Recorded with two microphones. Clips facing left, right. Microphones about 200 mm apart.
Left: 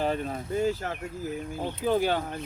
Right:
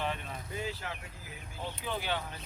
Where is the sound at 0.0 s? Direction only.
40° left (ahead or behind).